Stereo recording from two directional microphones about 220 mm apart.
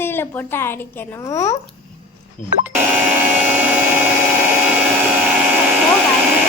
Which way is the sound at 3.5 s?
10° right (ahead or behind).